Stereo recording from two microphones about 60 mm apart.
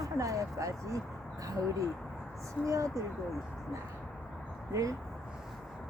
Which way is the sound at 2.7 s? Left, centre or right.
Right.